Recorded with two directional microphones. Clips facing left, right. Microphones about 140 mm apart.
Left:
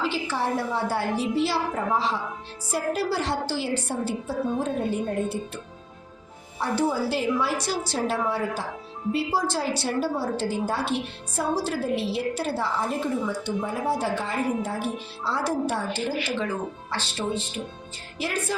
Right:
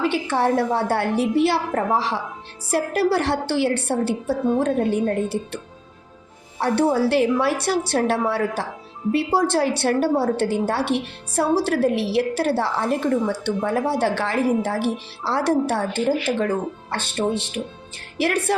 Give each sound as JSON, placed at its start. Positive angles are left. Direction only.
{"t": 0.0, "sound": "a woman's voice", "side_deg": -60}
{"t": 2.0, "sound": "a woman's voice", "side_deg": -75}
{"t": 6.6, "sound": "a woman's voice", "side_deg": -70}